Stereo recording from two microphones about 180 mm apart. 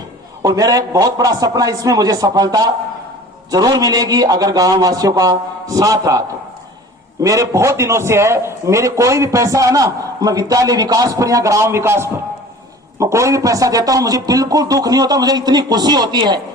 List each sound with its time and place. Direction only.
0.4 s a man's voice: 20° right (ahead or behind)